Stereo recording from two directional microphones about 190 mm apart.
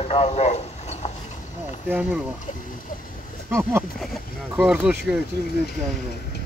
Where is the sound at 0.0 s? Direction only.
30° left (ahead or behind).